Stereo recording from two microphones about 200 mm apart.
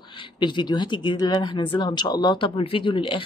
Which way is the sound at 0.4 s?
20° left (ahead or behind).